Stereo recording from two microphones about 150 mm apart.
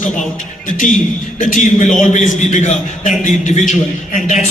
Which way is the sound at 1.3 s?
60° left (ahead or behind).